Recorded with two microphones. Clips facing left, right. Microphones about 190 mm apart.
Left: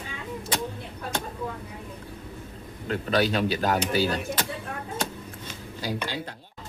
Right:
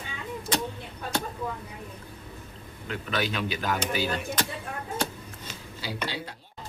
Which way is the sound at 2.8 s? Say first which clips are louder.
Left 6 dB; 40° left (ahead or behind).